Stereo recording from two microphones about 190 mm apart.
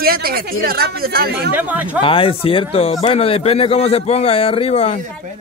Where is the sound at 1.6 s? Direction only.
10° right (ahead or behind).